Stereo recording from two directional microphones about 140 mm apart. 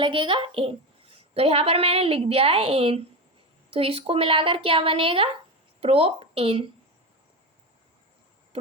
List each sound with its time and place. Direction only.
0.0 s a woman's voice: 35° right (ahead or behind)